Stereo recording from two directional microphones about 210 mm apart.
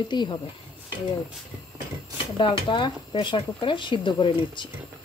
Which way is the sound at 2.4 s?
25° left (ahead or behind).